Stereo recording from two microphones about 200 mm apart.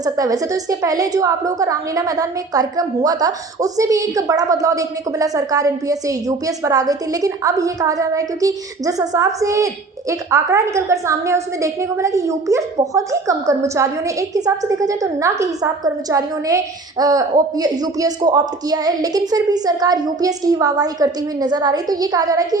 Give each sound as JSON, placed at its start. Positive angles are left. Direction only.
{"t": 0.0, "sound": "a woman's voice", "side_deg": -15}